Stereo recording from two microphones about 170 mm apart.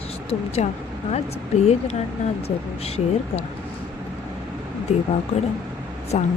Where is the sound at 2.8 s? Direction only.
35° left (ahead or behind).